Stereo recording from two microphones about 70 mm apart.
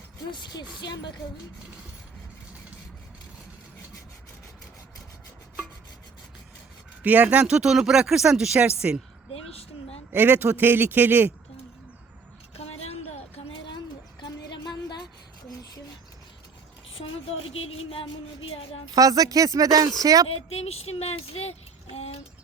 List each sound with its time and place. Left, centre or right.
0.3 s speech: left
7.0 s speech: right; by 8.6 s centre
8.6 s a man's voice: centre
10.1 s a man's voice: right
13.7 s a sound: left
18.9 s speech: right